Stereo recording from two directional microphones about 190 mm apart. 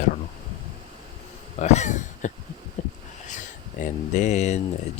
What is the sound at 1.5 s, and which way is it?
Speech, 35° left (ahead or behind).